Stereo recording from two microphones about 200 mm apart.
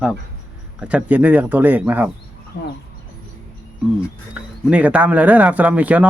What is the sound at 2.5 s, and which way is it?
Speech, 50° left (ahead or behind).